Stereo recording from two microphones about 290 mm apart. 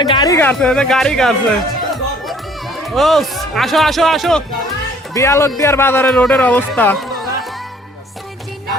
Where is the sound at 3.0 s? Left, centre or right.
Centre.